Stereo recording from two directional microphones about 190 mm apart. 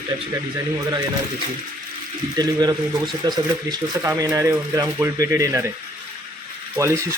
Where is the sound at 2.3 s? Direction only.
20° right (ahead or behind).